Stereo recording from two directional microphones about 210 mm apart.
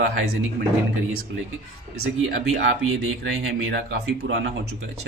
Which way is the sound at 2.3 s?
70° right (ahead or behind).